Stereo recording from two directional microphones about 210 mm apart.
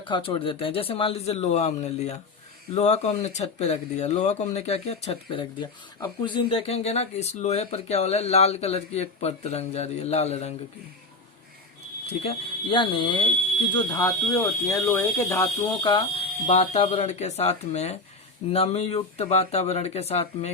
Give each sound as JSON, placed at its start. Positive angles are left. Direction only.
{"t": 0.0, "sound": "speech", "side_deg": 25}
{"t": 12.2, "sound": "speech", "side_deg": 25}
{"t": 16.5, "sound": "speech", "side_deg": 30}